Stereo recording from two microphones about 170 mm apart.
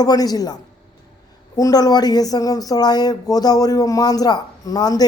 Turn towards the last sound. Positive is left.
turn(degrees=20)  # may be behind; listen again after turning